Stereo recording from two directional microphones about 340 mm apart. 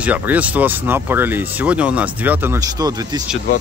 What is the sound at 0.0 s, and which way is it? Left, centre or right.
Speech, centre.